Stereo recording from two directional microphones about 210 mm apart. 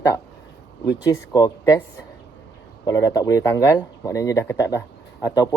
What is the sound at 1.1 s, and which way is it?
Speech, 15° left (ahead or behind).